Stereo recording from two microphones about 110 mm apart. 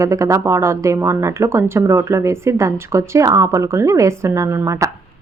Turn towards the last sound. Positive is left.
turn(degrees=-25)  # may be behind; listen again after turning